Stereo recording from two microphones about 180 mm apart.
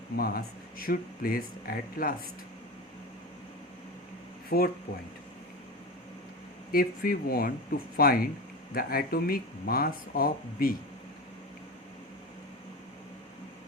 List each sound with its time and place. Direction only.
0.2 s speech: 55° left (ahead or behind)
4.4 s speech: 55° left (ahead or behind)
6.7 s speech: 55° left (ahead or behind)